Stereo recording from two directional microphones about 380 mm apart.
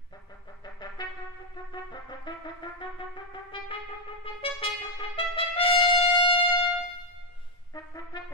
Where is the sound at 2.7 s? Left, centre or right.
Centre.